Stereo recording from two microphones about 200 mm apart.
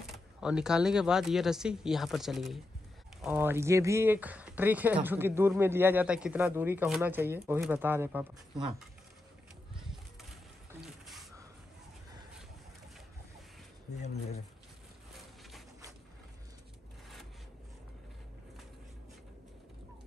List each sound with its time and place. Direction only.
0.0 s speech: 5° right (ahead or behind)
10.8 s a sound: centre (ahead or behind)
14.0 s speech: 35° left (ahead or behind)